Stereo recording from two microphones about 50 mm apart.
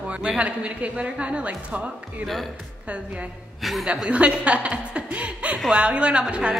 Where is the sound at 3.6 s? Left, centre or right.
Centre.